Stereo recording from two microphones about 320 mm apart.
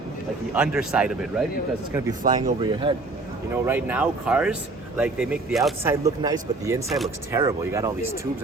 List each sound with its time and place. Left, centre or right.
0.5 s speech: centre
2.2 s speech: centre
8.0 s speech: left